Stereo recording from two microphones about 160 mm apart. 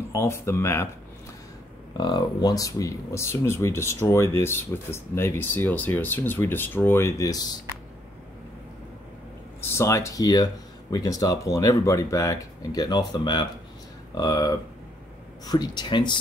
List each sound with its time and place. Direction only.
0.1 s speech: 15° left (ahead or behind)
2.0 s speech: 25° left (ahead or behind)
9.6 s speech: 15° left (ahead or behind)